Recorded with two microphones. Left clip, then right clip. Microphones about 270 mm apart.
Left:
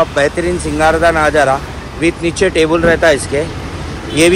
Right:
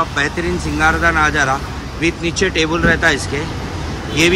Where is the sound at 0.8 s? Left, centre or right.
Centre.